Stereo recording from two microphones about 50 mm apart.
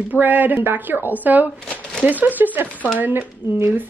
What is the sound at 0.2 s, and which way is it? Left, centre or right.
Speech, right.